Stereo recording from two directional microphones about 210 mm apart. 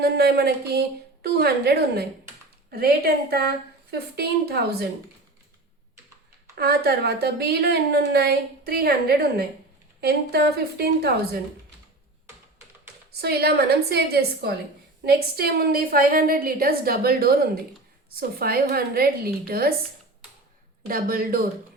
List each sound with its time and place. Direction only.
0.0 s a woman's voice: 50° right (ahead or behind)
6.6 s a woman's voice: 50° right (ahead or behind)
13.1 s a woman's voice: 50° right (ahead or behind)
20.8 s a woman's voice: 45° right (ahead or behind)